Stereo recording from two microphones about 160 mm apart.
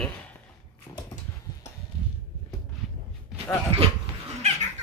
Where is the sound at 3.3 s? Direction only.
5° right (ahead or behind).